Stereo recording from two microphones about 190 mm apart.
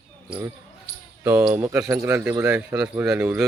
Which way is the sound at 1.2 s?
10° right (ahead or behind).